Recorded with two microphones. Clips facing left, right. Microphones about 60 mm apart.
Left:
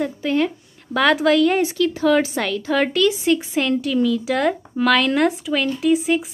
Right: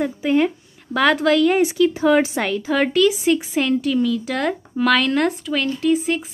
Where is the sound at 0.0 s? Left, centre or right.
Centre.